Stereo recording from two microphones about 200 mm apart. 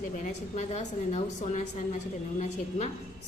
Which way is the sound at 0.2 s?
35° left (ahead or behind).